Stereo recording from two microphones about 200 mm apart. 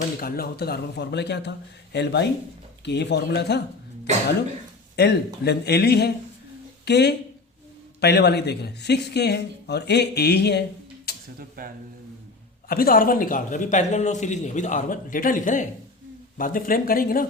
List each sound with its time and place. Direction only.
0.2 s speech: 50° left (ahead or behind)
4.9 s speech: 55° left (ahead or behind)
11.3 s speech: 45° right (ahead or behind)
12.6 s a man's voice: 50° left (ahead or behind)